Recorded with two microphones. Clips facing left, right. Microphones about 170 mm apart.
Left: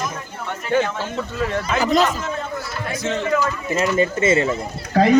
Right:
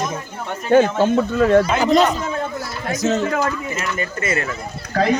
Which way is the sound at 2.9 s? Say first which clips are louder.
Right 5 dB; 45° right (ahead or behind).